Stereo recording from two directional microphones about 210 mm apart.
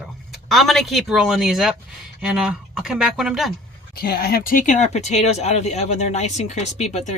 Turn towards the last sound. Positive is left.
turn(degrees=30)  # may be behind; listen again after turning